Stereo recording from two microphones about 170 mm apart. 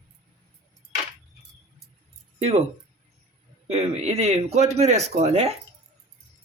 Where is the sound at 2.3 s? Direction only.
35° right (ahead or behind).